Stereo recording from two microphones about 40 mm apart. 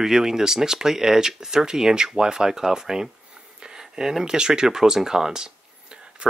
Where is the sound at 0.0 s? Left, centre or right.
Centre.